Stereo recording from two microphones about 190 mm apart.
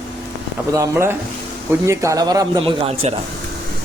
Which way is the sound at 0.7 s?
15° right (ahead or behind).